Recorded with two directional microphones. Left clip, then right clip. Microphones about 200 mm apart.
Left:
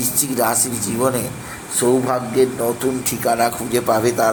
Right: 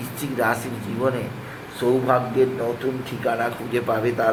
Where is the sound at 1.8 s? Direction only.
25° left (ahead or behind).